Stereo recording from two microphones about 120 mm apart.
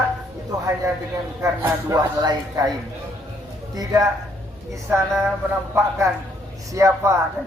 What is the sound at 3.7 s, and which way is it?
Speech, 30° right (ahead or behind).